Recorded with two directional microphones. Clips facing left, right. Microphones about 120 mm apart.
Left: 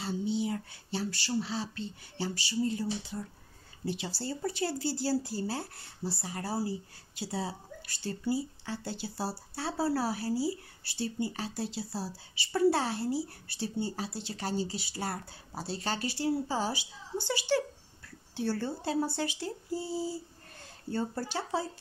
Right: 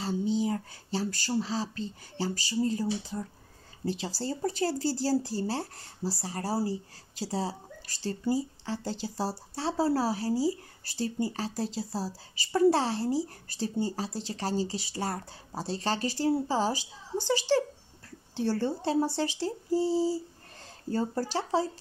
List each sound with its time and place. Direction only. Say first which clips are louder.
0.0 s speech: right 3 dB; 40° right (ahead or behind)